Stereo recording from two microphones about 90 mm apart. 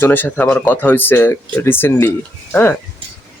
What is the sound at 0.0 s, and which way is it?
Speech, 20° left (ahead or behind).